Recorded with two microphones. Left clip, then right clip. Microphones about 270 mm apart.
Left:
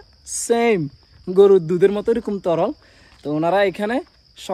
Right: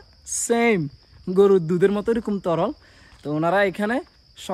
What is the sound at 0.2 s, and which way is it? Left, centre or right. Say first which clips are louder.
Speech: left 2 dB; centre.